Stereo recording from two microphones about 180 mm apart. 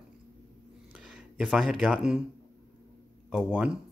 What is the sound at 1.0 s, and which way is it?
Speech, 5° right (ahead or behind).